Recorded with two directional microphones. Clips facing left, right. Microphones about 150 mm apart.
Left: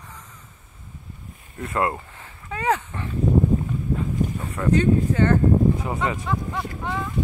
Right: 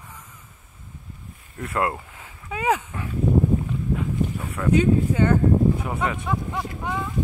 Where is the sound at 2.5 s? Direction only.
10° right (ahead or behind).